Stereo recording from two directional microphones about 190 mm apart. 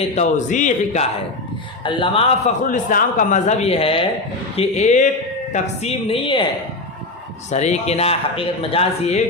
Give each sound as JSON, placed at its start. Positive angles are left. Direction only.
{"t": 0.2, "sound": "speech", "side_deg": 40}
{"t": 1.8, "sound": "a man's voice", "side_deg": 25}
{"t": 2.6, "sound": "speech", "side_deg": 45}
{"t": 7.5, "sound": "speech", "side_deg": 35}